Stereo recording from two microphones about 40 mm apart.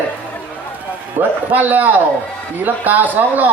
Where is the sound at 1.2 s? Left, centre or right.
Right.